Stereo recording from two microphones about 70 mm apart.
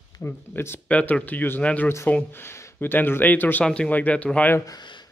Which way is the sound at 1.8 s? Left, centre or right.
Left.